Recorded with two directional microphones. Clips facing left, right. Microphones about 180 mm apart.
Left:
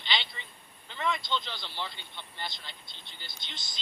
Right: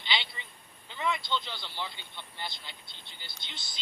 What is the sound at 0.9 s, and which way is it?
Speech, 15° right (ahead or behind).